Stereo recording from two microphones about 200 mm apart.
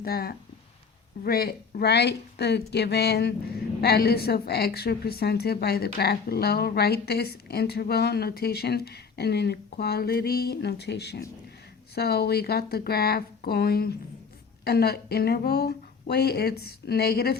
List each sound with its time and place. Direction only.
0.0 s speech: 50° left (ahead or behind)